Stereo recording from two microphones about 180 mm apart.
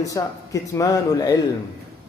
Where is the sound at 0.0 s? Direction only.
20° left (ahead or behind).